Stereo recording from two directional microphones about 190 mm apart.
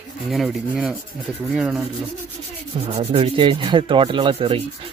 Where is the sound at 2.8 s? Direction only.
30° right (ahead or behind).